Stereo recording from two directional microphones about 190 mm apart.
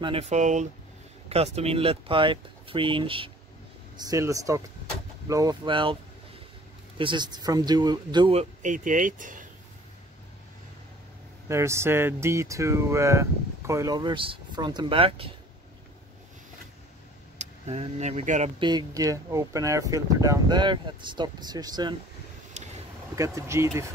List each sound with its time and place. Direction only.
0.0 s speech: 30° right (ahead or behind)
7.0 s speech: 25° right (ahead or behind); by 9.5 s 45° right (ahead or behind)
11.4 s speech: 15° right (ahead or behind)
17.4 s speech: 35° right (ahead or behind)
18.6 s speech: 20° right (ahead or behind)
23.1 s speech: 15° right (ahead or behind)